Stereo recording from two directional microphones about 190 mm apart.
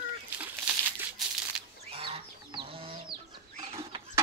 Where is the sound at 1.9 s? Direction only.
30° right (ahead or behind).